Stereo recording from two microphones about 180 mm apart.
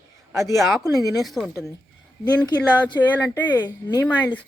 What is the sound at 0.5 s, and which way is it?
Speech, centre (ahead or behind).